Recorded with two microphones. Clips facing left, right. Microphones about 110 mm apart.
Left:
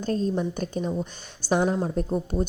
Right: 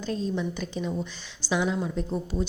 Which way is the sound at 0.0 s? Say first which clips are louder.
Left 4 dB; 45° left (ahead or behind).